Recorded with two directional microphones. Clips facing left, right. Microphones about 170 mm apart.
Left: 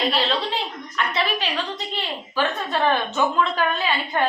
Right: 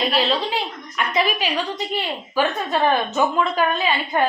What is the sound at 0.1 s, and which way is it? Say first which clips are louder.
A woman's voice: right 2 dB; 10° right (ahead or behind).